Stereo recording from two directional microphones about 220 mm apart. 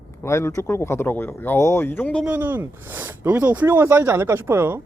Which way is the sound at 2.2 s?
10° right (ahead or behind).